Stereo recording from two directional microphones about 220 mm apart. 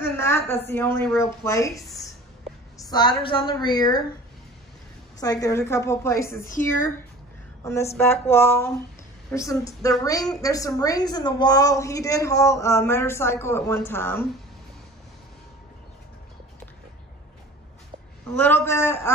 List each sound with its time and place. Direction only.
0.0 s a woman's voice: 10° left (ahead or behind)
2.8 s a woman's voice: 20° left (ahead or behind)
5.2 s a woman's voice: 15° left (ahead or behind)
7.6 s a woman's voice: 10° left (ahead or behind)
18.4 s a woman's voice: 10° left (ahead or behind)